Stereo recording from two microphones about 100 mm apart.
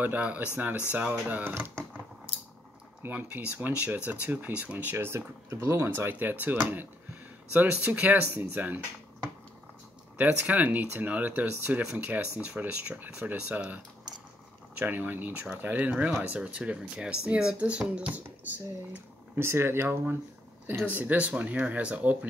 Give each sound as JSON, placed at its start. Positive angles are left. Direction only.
{"t": 0.0, "sound": "speech", "side_deg": -15}
{"t": 3.0, "sound": "speech", "side_deg": -15}
{"t": 14.8, "sound": "speech", "side_deg": -15}
{"t": 19.3, "sound": "speech", "side_deg": -25}